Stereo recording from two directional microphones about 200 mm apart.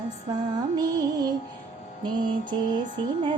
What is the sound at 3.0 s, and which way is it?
Music, 20° right (ahead or behind).